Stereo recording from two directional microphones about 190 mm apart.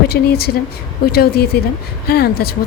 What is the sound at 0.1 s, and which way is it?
Speech, 55° left (ahead or behind).